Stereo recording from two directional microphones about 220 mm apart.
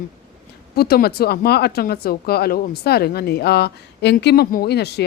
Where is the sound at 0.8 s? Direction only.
45° left (ahead or behind).